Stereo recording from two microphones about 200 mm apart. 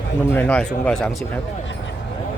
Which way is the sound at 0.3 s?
5° left (ahead or behind).